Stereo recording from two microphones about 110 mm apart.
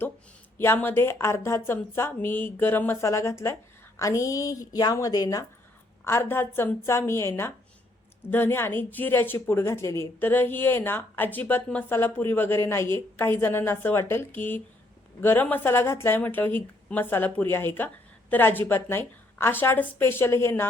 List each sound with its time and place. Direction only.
0.6 s a woman's voice: 20° left (ahead or behind); by 5.5 s 35° left (ahead or behind)
6.1 s a woman's voice: 20° left (ahead or behind)